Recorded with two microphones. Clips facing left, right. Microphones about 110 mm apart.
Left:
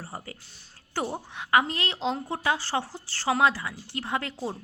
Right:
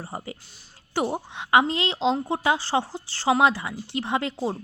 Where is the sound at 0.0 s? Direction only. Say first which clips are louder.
Right 4 dB; 20° right (ahead or behind).